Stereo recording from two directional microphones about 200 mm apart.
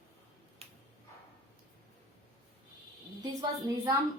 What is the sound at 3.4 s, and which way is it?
Speech, 15° right (ahead or behind).